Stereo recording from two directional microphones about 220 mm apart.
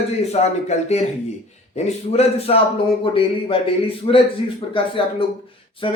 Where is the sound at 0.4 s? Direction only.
25° left (ahead or behind).